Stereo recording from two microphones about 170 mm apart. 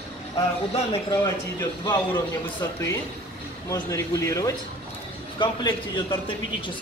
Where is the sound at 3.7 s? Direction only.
20° left (ahead or behind).